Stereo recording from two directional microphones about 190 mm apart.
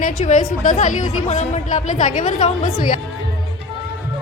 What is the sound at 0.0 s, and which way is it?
A woman's voice, 40° left (ahead or behind).